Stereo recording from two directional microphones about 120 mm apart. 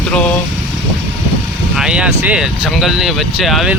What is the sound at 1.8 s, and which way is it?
Speech, 10° right (ahead or behind).